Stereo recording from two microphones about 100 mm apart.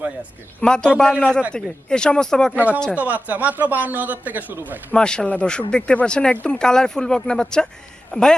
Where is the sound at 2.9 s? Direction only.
15° right (ahead or behind).